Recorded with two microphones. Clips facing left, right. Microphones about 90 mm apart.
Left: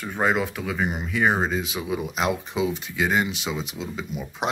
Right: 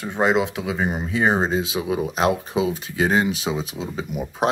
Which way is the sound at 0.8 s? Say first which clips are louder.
Right 2 dB; 35° right (ahead or behind).